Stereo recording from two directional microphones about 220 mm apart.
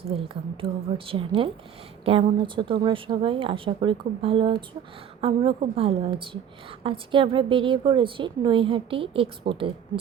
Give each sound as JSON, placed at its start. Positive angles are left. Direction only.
{"t": 0.0, "sound": "a woman's voice", "side_deg": -25}